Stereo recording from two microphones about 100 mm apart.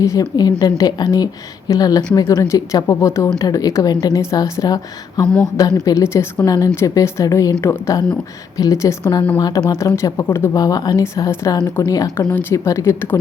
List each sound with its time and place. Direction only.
0.0 s a woman's voice: 35° left (ahead or behind)
10.5 s a woman's voice: 40° left (ahead or behind)
11.0 s a woman's voice: 25° left (ahead or behind)
12.3 s speech: 20° left (ahead or behind)